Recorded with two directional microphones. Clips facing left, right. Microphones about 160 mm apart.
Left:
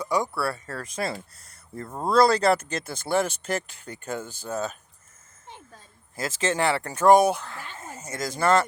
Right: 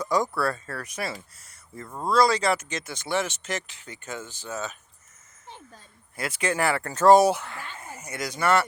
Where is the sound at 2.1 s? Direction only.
55° left (ahead or behind).